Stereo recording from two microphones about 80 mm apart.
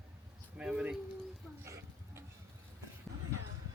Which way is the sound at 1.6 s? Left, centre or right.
Right.